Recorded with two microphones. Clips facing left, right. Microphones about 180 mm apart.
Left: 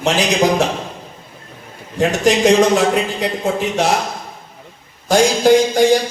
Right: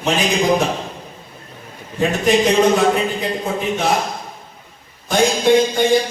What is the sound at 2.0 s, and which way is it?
A man's voice, 80° left.